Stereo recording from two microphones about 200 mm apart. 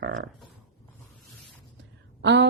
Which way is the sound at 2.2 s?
60° right (ahead or behind).